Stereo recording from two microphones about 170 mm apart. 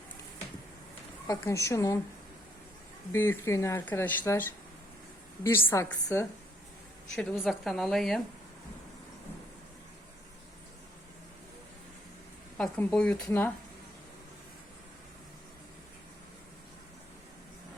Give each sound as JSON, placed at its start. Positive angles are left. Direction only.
{"t": 1.3, "sound": "speech", "side_deg": 15}
{"t": 3.1, "sound": "speech", "side_deg": 15}
{"t": 7.3, "sound": "speech", "side_deg": 0}
{"t": 12.5, "sound": "speech", "side_deg": 5}